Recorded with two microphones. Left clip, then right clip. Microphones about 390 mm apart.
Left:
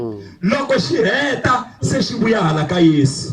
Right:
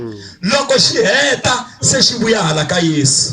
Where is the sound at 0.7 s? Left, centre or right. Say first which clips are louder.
Right 5 dB; centre.